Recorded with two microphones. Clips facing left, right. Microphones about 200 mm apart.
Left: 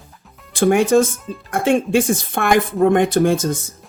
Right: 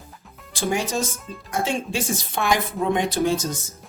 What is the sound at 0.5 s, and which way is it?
Speech, 55° left (ahead or behind).